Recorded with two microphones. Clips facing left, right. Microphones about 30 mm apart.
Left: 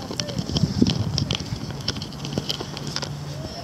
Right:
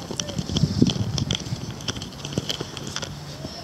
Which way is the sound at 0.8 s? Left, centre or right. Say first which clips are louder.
Even; left.